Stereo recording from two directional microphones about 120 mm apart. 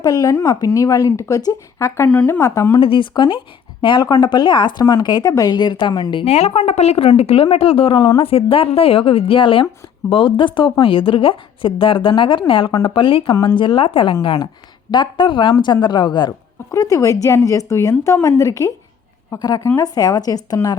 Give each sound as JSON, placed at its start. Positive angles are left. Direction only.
{"t": 0.0, "sound": "speech", "side_deg": 30}
{"t": 2.0, "sound": "speech", "side_deg": 15}
{"t": 2.8, "sound": "a woman's voice", "side_deg": 45}
{"t": 6.2, "sound": "a woman's voice", "side_deg": 60}
{"t": 16.7, "sound": "a woman's voice", "side_deg": 30}